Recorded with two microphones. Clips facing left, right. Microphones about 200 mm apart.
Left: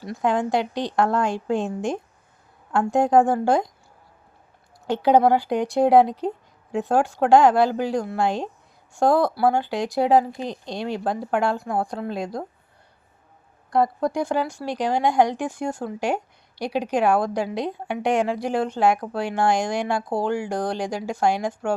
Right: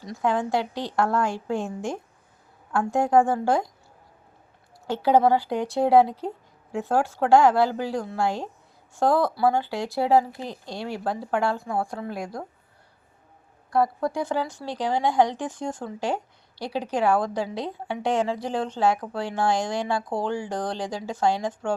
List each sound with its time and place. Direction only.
0.2 s speech: 15° left (ahead or behind)
4.9 s a woman's voice: 15° left (ahead or behind)
13.7 s speech: 15° left (ahead or behind)